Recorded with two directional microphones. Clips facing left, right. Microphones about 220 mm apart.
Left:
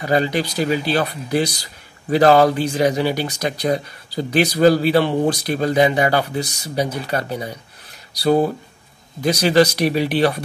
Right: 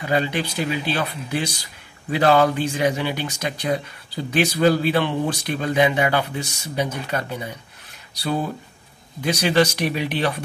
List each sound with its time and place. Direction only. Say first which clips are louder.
0.0 s speech: left 4 dB; 40° left (ahead or behind)